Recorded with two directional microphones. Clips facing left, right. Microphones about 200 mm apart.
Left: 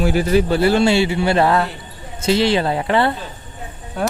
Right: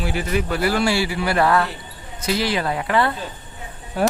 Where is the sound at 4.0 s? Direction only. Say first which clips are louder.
Right 2 dB; 5° right (ahead or behind).